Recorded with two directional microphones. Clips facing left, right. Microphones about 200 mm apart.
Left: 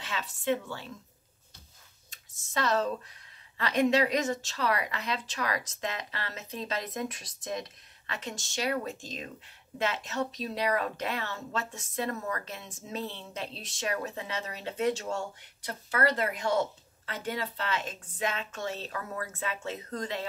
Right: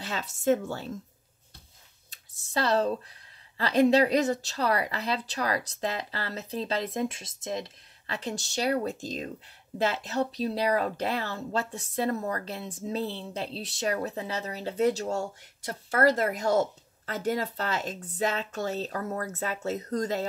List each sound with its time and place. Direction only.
0.0 s speech: 40° right (ahead or behind)
2.0 s a sound: 35° right (ahead or behind)
3.5 s speech: 35° right (ahead or behind)